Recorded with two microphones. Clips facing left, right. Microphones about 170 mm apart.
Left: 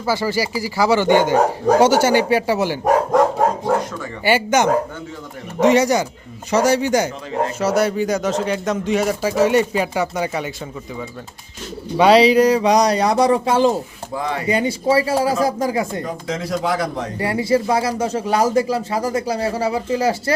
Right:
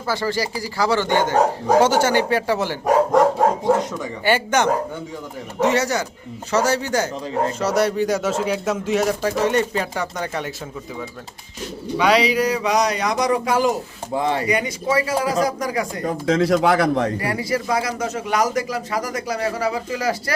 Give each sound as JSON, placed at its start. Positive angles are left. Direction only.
{"t": 0.0, "sound": "speech", "side_deg": 10}
{"t": 4.2, "sound": "speech", "side_deg": 10}
{"t": 7.6, "sound": "speech", "side_deg": 0}
{"t": 11.9, "sound": "speech", "side_deg": 30}
{"t": 14.1, "sound": "speech", "side_deg": -25}
{"t": 14.4, "sound": "a man's voice", "side_deg": 30}
{"t": 16.2, "sound": "a man's voice", "side_deg": -65}
{"t": 17.2, "sound": "a man's voice", "side_deg": 25}